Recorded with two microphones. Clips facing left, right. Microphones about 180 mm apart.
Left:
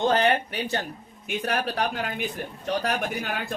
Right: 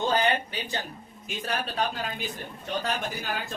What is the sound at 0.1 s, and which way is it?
Speech, 65° left (ahead or behind).